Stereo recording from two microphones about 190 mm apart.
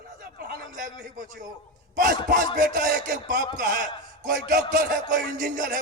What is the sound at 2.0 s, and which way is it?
Music, 45° right (ahead or behind).